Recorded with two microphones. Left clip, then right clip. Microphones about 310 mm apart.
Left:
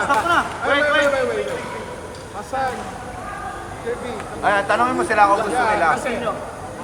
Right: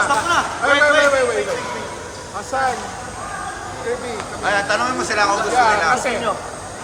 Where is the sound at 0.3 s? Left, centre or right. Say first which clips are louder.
Right 2 dB; centre.